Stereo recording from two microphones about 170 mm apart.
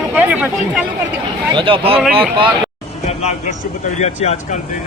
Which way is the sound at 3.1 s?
40° left (ahead or behind).